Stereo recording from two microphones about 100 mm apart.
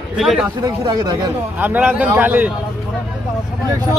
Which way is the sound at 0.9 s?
45° right (ahead or behind).